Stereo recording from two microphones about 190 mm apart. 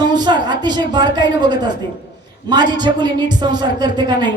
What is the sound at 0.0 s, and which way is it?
Speech, 20° right (ahead or behind).